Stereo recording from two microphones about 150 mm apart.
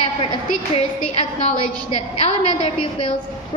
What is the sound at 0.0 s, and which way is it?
A woman's voice, 40° left (ahead or behind).